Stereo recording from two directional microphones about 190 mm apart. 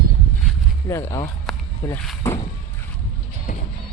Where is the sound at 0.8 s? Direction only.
15° left (ahead or behind).